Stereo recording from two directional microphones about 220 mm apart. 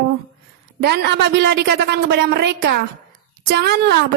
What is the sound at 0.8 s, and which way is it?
A woman's voice, 50° right (ahead or behind).